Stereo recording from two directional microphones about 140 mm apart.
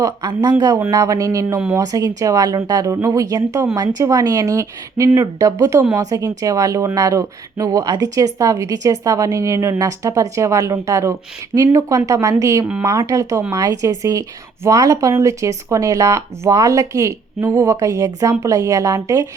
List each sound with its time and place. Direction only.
0.0 s speech: 30° right (ahead or behind)